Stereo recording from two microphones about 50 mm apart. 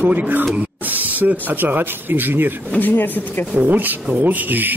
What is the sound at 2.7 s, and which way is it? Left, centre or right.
Speech, left.